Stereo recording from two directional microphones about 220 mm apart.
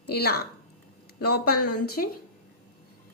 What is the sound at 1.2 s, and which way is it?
Speech, 90° left.